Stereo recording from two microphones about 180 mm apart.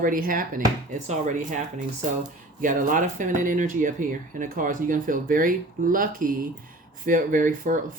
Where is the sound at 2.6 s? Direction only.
45° right (ahead or behind).